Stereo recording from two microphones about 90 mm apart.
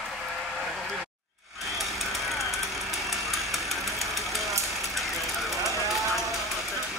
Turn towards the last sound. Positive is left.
turn(degrees=0)  # may be behind; listen again after turning